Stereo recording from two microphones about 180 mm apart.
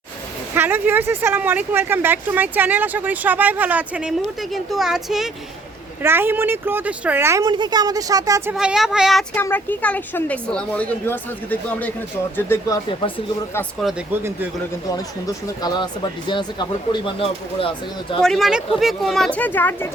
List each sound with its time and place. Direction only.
0.5 s speech: 10° right (ahead or behind)
6.0 s speech: 10° right (ahead or behind)
8.5 s speech: centre (ahead or behind)
9.3 s a woman's voice: 10° left (ahead or behind)
12.5 s speech: 20° left (ahead or behind)
13.8 s speech: 10° right (ahead or behind)
15.6 s speech: 25° left (ahead or behind)
18.2 s speech: centre (ahead or behind)